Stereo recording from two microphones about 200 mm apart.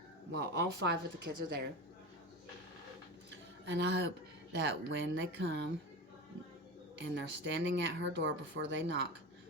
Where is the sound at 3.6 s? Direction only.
60° right (ahead or behind).